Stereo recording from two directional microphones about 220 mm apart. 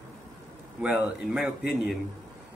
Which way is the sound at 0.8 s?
5° right (ahead or behind).